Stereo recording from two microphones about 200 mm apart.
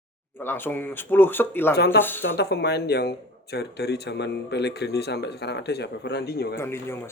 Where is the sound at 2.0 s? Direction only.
10° left (ahead or behind).